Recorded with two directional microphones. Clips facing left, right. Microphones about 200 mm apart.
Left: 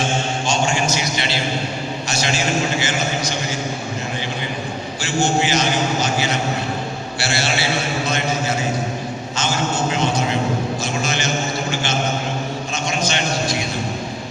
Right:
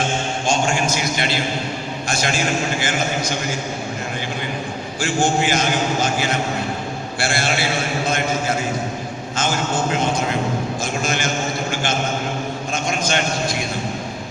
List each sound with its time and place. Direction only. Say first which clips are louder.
0.4 s a sound: right 2 dB; 50° right (ahead or behind)
2.0 s a man's voice: right 1 dB; 50° right (ahead or behind)
5.0 s a man's voice: even; 50° right (ahead or behind)